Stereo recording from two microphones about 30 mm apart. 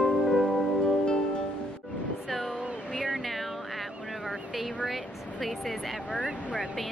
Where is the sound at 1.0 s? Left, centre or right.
Left.